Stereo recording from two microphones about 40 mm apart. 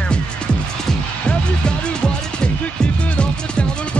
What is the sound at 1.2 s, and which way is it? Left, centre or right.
Music, left.